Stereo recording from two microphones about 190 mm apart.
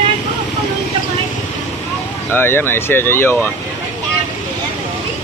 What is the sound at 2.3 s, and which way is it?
Speech, 10° left (ahead or behind).